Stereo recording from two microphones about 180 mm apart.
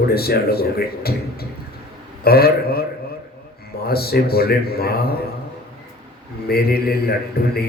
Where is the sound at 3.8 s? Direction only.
60° left (ahead or behind).